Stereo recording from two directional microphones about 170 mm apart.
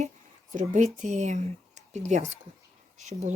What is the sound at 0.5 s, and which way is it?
Speech, 45° right (ahead or behind).